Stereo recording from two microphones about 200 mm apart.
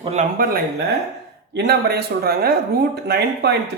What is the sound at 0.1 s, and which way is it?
Speech, 40° right (ahead or behind).